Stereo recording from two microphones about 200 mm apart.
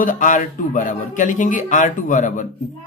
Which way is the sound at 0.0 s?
40° left (ahead or behind).